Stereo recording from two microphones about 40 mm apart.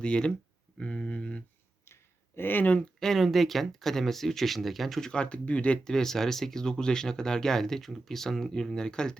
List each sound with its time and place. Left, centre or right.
0.0 s speech: left
2.3 s speech: left
3.0 s speech: centre
4.9 s speech: centre
5.2 s speech: left
5.8 s speech: centre